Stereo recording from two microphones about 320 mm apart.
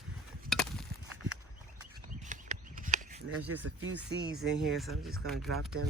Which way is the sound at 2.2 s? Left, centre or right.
Right.